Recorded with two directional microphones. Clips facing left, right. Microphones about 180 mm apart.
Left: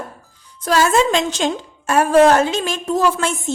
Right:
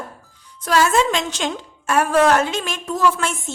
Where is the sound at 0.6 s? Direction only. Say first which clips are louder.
Left 2 dB; 35° left (ahead or behind).